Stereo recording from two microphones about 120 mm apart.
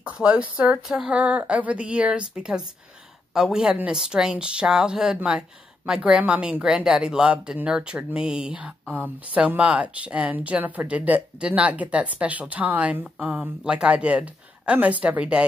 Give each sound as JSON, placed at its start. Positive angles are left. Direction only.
{"t": 0.0, "sound": "a woman's voice", "side_deg": -10}